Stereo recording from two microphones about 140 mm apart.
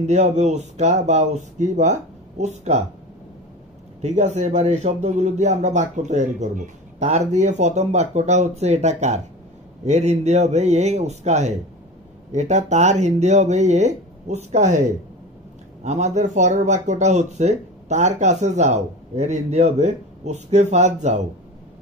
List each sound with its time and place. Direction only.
0.0 s speech: 55° right (ahead or behind)
4.0 s speech: 55° right (ahead or behind)
15.8 s speech: 55° right (ahead or behind)